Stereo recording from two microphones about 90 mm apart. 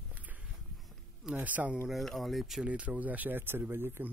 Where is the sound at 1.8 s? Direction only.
Centre (ahead or behind).